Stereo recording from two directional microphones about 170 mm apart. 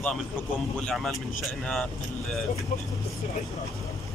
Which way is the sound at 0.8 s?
Centre (ahead or behind).